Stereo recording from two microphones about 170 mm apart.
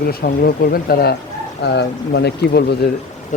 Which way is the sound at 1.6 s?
75° left (ahead or behind).